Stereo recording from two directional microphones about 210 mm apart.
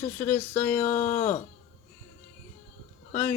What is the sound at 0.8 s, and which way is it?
Speech, 35° left (ahead or behind).